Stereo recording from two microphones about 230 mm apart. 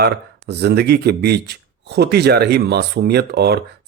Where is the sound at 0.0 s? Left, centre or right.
Right.